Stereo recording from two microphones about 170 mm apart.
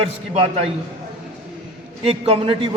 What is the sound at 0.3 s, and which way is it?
Speech, 35° right (ahead or behind).